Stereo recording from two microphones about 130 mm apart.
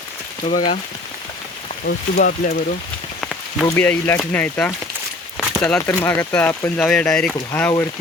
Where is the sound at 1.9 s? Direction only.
90° left.